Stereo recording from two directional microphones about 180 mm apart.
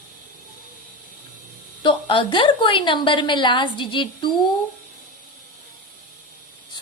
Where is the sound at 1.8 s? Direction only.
30° left (ahead or behind).